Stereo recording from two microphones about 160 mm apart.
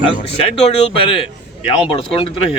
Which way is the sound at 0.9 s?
35° left (ahead or behind).